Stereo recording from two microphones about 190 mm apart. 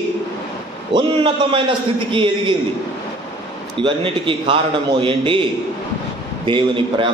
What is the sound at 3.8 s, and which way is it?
A man's voice, 25° right (ahead or behind).